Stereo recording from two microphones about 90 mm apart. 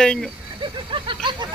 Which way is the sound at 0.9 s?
65° right (ahead or behind).